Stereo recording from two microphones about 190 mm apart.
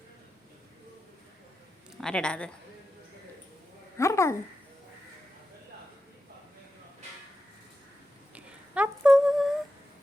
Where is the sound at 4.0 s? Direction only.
15° left (ahead or behind).